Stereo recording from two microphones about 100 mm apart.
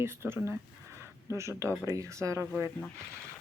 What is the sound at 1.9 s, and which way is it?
Speech, 30° right (ahead or behind).